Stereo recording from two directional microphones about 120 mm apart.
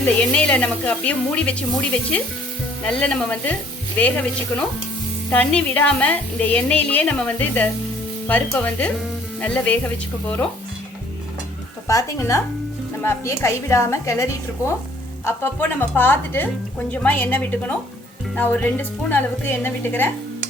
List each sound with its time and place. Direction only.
0.0 s speech: 10° left (ahead or behind)
11.9 s a woman's voice: 25° left (ahead or behind)